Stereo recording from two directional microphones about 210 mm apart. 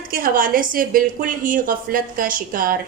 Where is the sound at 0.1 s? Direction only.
40° right (ahead or behind).